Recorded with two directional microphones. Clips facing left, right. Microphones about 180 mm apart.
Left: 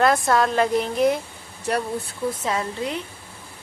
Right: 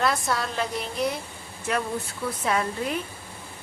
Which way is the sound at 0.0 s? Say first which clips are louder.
Left 7 dB; 50° left (ahead or behind).